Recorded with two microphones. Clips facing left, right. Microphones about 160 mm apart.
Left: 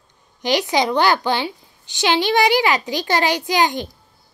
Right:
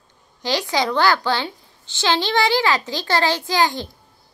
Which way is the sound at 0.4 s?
20° left (ahead or behind).